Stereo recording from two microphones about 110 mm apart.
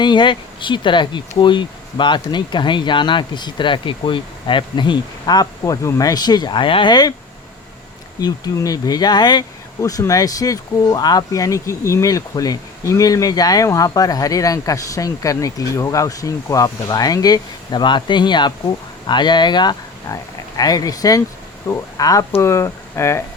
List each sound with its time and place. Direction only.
0.0 s speech: 45° left (ahead or behind)
8.2 s speech: 35° left (ahead or behind)